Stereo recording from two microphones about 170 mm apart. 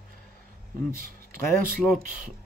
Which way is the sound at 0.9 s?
55° right (ahead or behind).